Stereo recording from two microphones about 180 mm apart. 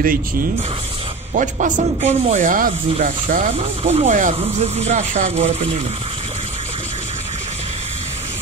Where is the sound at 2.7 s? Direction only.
30° right (ahead or behind).